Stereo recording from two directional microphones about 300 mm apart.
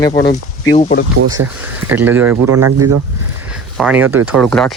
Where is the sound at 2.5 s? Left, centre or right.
Right.